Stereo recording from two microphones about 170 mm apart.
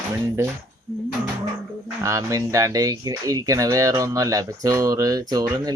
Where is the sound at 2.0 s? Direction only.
20° right (ahead or behind).